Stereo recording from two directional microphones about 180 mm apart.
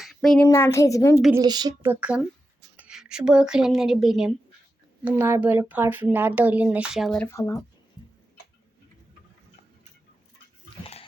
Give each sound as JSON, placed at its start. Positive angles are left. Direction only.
{"t": 0.0, "sound": "a sound", "side_deg": 0}
{"t": 0.4, "sound": "speech", "side_deg": 15}
{"t": 1.3, "sound": "speech", "side_deg": -20}
{"t": 1.9, "sound": "a woman's voice", "side_deg": -5}
{"t": 7.3, "sound": "speech", "side_deg": 15}